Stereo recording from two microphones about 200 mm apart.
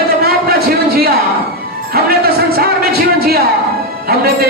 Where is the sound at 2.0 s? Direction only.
50° right (ahead or behind).